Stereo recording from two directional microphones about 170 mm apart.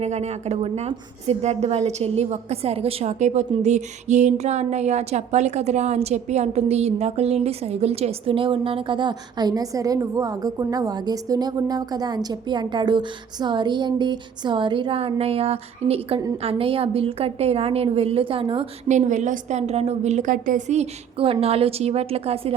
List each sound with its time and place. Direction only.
0.0 s speech: 40° right (ahead or behind)
18.9 s speech: 45° right (ahead or behind)